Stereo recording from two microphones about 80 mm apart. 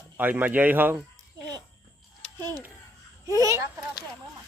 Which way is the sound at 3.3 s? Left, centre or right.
Right.